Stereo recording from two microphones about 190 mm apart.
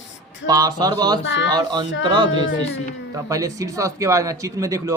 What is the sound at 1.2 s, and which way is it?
Speech, 75° left (ahead or behind).